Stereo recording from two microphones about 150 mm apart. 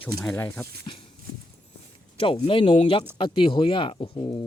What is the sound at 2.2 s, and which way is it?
Speech, 35° left (ahead or behind).